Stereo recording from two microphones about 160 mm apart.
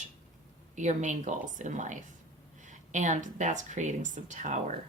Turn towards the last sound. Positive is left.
turn(degrees=-50)  # may be behind; listen again after turning